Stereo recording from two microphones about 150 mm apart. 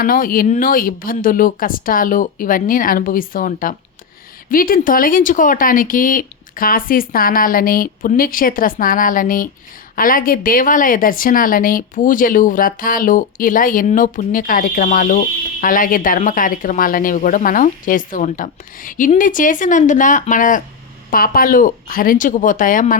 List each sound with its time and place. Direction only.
0.0 s a woman's voice: 70° left (ahead or behind)
21.1 s speech: 70° left (ahead or behind)